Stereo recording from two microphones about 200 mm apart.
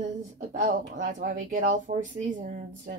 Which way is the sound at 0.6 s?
35° right (ahead or behind).